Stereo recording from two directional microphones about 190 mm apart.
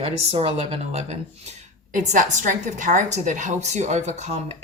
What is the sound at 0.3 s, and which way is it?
A woman's voice, 30° right (ahead or behind).